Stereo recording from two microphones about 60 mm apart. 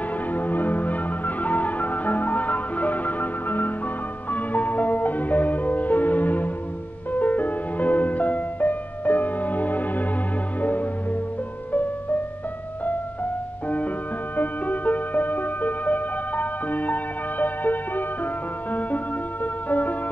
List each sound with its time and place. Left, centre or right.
0.3 s music: left
14.3 s music: left